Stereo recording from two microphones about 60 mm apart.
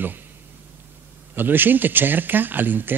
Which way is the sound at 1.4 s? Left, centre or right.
Right.